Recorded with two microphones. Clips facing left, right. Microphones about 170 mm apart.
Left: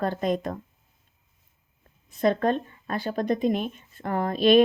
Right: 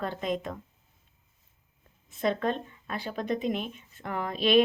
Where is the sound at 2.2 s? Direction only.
45° left (ahead or behind).